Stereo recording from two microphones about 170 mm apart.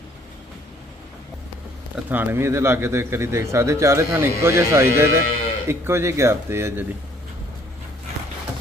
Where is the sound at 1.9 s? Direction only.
10° right (ahead or behind).